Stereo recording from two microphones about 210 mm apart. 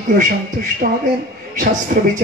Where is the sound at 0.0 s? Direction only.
40° right (ahead or behind).